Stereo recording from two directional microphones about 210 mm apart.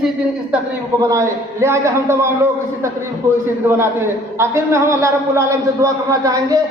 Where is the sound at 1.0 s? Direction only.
15° right (ahead or behind).